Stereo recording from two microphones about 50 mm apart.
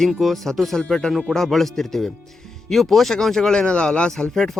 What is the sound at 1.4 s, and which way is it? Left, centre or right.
A man's voice, centre.